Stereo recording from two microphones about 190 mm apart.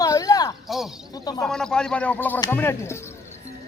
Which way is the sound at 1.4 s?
5° left (ahead or behind).